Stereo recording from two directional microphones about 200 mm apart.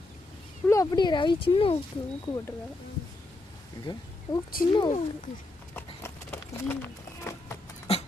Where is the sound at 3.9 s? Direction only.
25° left (ahead or behind).